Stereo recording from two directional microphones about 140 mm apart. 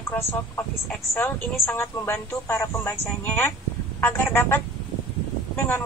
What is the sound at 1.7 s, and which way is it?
Speech, 20° left (ahead or behind).